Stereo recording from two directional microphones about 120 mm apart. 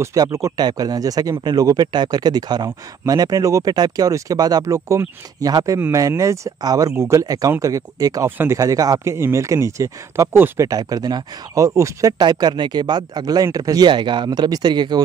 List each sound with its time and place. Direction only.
0.0 s speech: 30° right (ahead or behind)
10.7 s speech: 30° right (ahead or behind)